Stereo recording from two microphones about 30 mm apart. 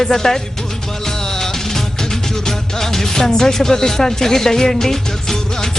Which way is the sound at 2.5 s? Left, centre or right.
Centre.